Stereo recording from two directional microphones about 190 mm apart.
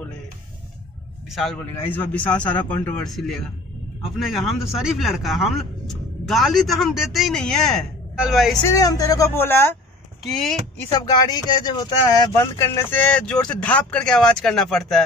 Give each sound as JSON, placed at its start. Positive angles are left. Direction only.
{"t": 1.3, "sound": "a man's voice", "side_deg": 0}
{"t": 8.7, "sound": "a man's voice", "side_deg": 20}
{"t": 10.9, "sound": "speech", "side_deg": 20}